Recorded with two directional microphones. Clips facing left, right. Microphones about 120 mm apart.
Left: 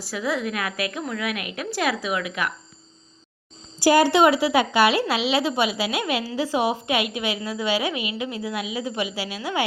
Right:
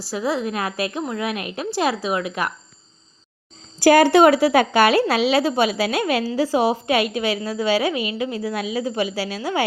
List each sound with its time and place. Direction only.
0.0 s a woman's voice: 30° right (ahead or behind)
3.8 s a woman's voice: 55° right (ahead or behind); by 9.6 s 35° right (ahead or behind)